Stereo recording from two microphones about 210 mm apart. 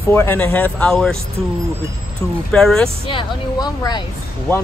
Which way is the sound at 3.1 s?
20° left (ahead or behind).